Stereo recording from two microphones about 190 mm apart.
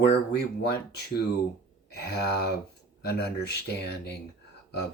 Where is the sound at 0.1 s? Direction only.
60° left (ahead or behind).